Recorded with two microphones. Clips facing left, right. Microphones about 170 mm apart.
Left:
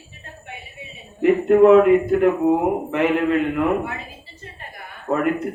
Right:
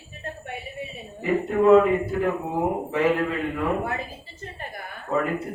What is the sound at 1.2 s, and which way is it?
Speech, 65° left (ahead or behind).